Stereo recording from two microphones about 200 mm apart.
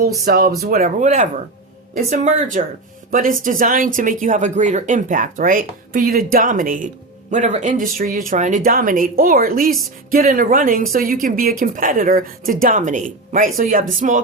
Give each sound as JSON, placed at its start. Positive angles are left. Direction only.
{"t": 0.3, "sound": "speech", "side_deg": -45}